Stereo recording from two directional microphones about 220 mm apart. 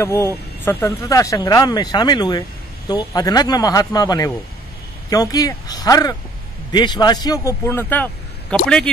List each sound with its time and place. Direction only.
0.0 s speech: 10° left (ahead or behind)